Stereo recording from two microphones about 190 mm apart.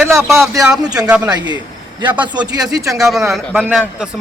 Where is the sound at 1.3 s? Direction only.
20° right (ahead or behind).